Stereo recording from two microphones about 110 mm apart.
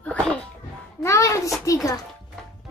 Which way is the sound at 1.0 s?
25° left (ahead or behind).